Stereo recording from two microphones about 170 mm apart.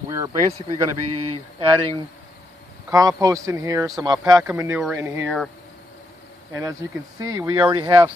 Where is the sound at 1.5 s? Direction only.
25° right (ahead or behind).